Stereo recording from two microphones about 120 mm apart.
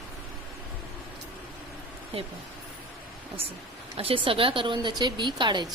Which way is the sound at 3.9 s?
50° right (ahead or behind).